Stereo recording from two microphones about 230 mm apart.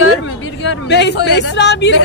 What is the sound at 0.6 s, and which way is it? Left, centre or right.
Speech, left.